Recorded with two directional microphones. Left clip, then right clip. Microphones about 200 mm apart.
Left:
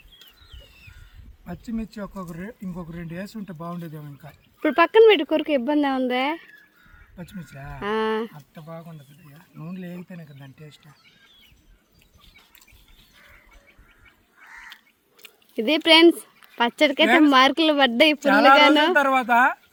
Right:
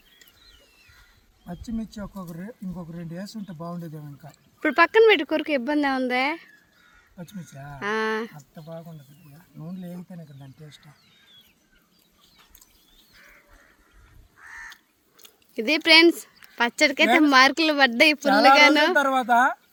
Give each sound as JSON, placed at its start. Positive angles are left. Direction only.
{"t": 1.5, "sound": "speech", "side_deg": -5}
{"t": 4.3, "sound": "speech", "side_deg": 15}
{"t": 7.2, "sound": "speech", "side_deg": 0}
{"t": 7.8, "sound": "speech", "side_deg": 15}
{"t": 8.6, "sound": "speech", "side_deg": 5}
{"t": 15.5, "sound": "speech", "side_deg": 20}
{"t": 18.9, "sound": "speech", "side_deg": 0}